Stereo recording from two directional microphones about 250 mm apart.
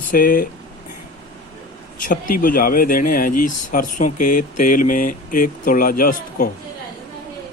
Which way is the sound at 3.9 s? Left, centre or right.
Left.